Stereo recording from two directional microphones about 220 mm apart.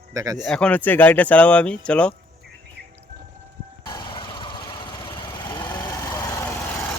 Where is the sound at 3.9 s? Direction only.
20° left (ahead or behind).